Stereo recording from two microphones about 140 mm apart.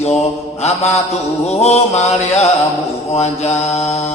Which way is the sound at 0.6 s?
50° left (ahead or behind).